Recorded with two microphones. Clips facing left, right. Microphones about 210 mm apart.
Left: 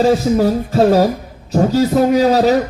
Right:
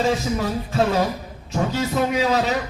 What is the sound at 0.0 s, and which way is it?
A man's voice, 35° left (ahead or behind).